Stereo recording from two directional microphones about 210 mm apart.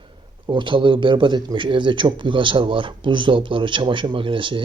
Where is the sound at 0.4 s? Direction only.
25° right (ahead or behind).